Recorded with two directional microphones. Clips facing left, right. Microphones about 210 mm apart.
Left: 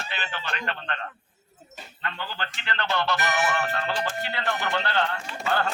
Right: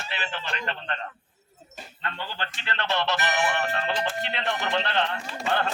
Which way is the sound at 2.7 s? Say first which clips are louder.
Even; 25° right (ahead or behind).